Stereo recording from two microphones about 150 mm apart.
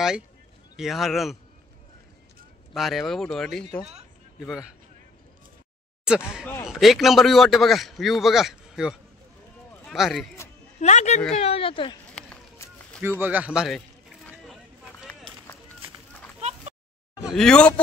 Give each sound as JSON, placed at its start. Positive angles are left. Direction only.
{"t": 0.7, "sound": "a man's voice", "side_deg": 0}
{"t": 2.7, "sound": "a man's voice", "side_deg": 0}
{"t": 6.0, "sound": "a man's voice", "side_deg": -5}
{"t": 10.8, "sound": "speech", "side_deg": 50}
{"t": 13.2, "sound": "a man's voice", "side_deg": -10}
{"t": 14.4, "sound": "a sound", "side_deg": 0}
{"t": 16.3, "sound": "a sound", "side_deg": -45}
{"t": 17.2, "sound": "speech", "side_deg": 0}